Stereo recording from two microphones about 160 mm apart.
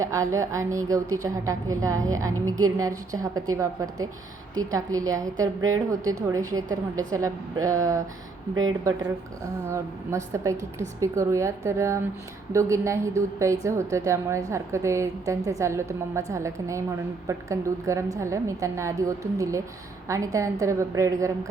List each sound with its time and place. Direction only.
0.0 s a woman's voice: 20° right (ahead or behind)